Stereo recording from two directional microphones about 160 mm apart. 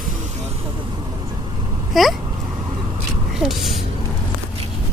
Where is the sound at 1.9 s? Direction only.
Centre (ahead or behind).